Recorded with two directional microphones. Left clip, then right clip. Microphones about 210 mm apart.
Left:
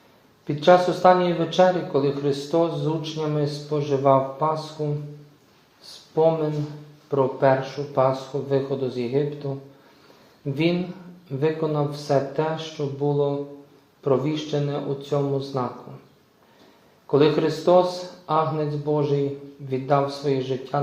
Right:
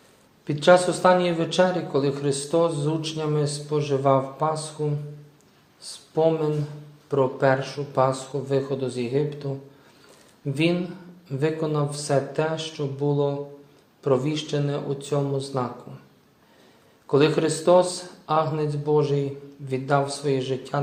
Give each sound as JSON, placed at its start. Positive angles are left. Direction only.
{"t": 0.4, "sound": "speech", "side_deg": -35}
{"t": 6.1, "sound": "speech", "side_deg": -30}
{"t": 10.5, "sound": "speech", "side_deg": -30}
{"t": 17.1, "sound": "speech", "side_deg": -30}